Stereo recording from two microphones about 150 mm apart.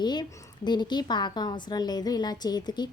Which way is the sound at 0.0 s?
30° left (ahead or behind).